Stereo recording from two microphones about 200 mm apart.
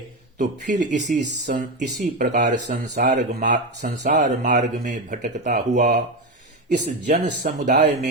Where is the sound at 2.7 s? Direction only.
50° right (ahead or behind).